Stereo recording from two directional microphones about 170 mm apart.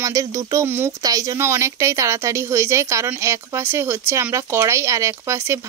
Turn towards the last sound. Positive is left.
turn(degrees=-15)  # may be behind; listen again after turning